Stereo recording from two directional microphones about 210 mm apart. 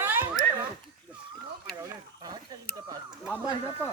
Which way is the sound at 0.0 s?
10° right (ahead or behind).